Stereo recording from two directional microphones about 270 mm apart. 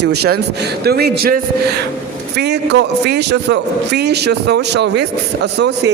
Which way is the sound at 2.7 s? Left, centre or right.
Right.